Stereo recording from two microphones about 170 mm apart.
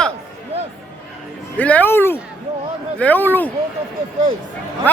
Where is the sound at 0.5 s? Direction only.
35° right (ahead or behind).